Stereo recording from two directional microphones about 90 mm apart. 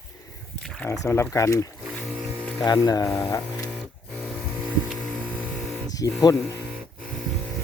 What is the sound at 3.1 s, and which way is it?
Speech, 25° left (ahead or behind).